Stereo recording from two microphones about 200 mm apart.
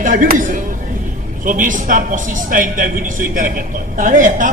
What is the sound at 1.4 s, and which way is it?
A woman's voice, 40° right (ahead or behind).